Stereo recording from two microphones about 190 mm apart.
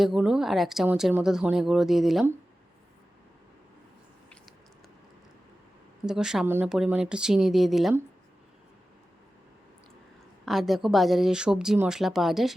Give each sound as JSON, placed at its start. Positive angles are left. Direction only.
{"t": 0.0, "sound": "speech", "side_deg": 0}
{"t": 6.1, "sound": "speech", "side_deg": -5}
{"t": 10.4, "sound": "speech", "side_deg": 0}